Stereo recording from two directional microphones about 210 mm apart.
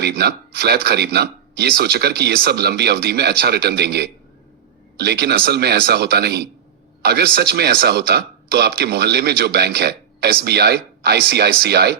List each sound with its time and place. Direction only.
0.0 s speech: 50° right (ahead or behind)